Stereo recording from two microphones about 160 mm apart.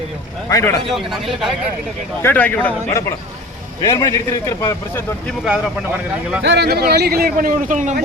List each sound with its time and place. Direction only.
0.5 s speech: 20° left (ahead or behind)
0.9 s speech: centre (ahead or behind)
2.2 s speech: 10° left (ahead or behind)
3.8 s speech: 20° left (ahead or behind)
6.4 s speech: 90° right; by 8.0 s 50° right (ahead or behind)